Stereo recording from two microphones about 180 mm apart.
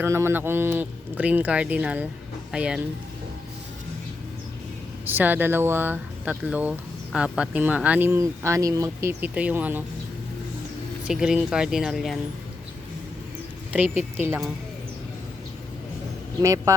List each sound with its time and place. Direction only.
0.0 s speech: 15° right (ahead or behind)
5.0 s speech: 10° right (ahead or behind)
11.0 s speech: 5° right (ahead or behind)
13.7 s speech: 10° right (ahead or behind)
16.4 s speech: 15° right (ahead or behind)